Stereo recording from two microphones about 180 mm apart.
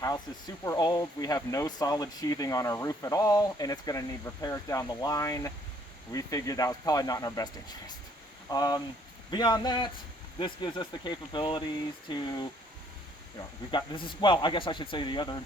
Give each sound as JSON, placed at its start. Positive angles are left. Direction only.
{"t": 0.0, "sound": "speech", "side_deg": 20}
{"t": 13.7, "sound": "speech", "side_deg": 25}